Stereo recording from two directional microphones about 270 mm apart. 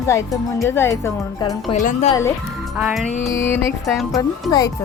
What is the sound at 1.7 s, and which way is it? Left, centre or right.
Speech, left.